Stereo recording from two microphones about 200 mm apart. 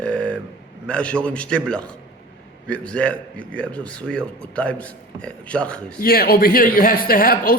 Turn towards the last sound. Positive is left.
turn(degrees=45)  # may be behind; listen again after turning